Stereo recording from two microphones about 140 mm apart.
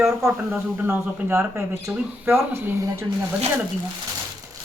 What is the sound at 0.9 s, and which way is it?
Speech, 15° right (ahead or behind).